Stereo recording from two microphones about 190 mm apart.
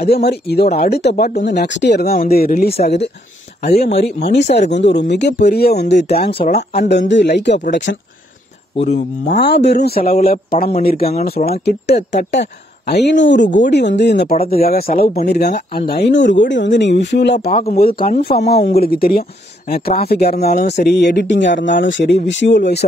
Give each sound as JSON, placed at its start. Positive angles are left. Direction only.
{"t": 0.1, "sound": "speech", "side_deg": 60}
{"t": 6.4, "sound": "speech", "side_deg": 40}
{"t": 6.9, "sound": "speech", "side_deg": 65}
{"t": 8.7, "sound": "speech", "side_deg": 35}
{"t": 9.3, "sound": "a man's voice", "side_deg": 65}
{"t": 14.4, "sound": "a man's voice", "side_deg": 50}
{"t": 17.5, "sound": "a man's voice", "side_deg": 45}